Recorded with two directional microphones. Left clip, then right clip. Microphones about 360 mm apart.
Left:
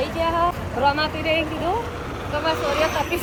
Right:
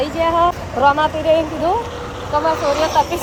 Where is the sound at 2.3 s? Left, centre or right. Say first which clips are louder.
Right 7 dB; centre.